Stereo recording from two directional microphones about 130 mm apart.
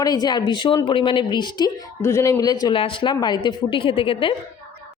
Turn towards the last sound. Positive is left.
turn(degrees=40)  # may be behind; listen again after turning